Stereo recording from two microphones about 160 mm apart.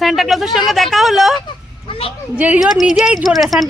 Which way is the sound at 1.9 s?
35° left (ahead or behind).